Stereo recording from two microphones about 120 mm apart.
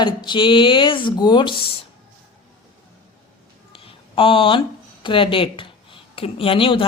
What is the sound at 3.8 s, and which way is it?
Speech, 50° left (ahead or behind).